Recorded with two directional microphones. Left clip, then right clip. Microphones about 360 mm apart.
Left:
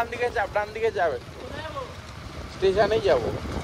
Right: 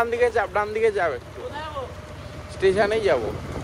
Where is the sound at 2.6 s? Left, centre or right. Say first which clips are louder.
Right 1 dB; centre.